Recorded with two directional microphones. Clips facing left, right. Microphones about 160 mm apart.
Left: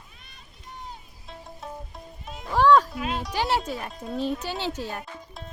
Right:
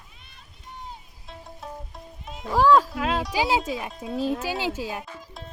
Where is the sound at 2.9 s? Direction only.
90° right.